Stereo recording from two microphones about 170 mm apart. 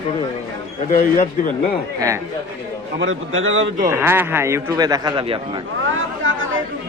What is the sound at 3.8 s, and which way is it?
A man's voice, 15° right (ahead or behind).